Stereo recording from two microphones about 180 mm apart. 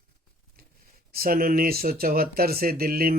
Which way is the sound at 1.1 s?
55° right (ahead or behind).